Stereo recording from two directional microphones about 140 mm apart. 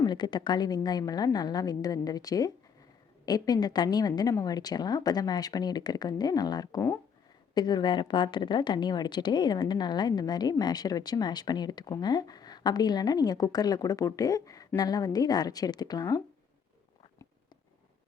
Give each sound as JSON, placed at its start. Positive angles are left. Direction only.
{"t": 0.0, "sound": "a woman's voice", "side_deg": 30}